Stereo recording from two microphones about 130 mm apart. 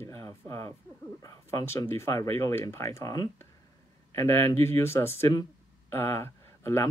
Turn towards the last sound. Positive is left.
turn(degrees=20)  # may be behind; listen again after turning